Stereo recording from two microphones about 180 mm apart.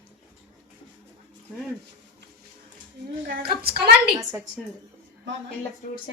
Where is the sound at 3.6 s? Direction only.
60° right (ahead or behind).